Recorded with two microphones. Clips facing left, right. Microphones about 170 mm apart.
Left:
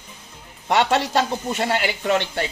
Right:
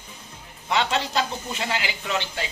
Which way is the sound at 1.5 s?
50° left (ahead or behind).